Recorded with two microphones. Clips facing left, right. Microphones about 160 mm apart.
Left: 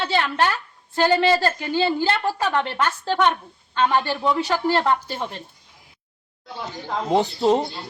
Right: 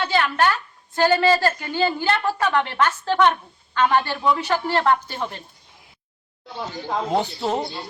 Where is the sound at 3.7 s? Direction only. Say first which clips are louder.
Right 1 dB; 25° left (ahead or behind).